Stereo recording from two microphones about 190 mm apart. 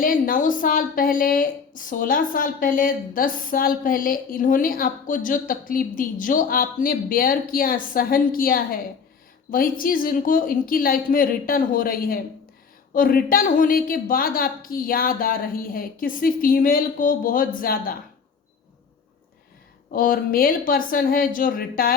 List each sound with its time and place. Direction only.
0.0 s speech: 45° left (ahead or behind)
19.9 s speech: 45° left (ahead or behind)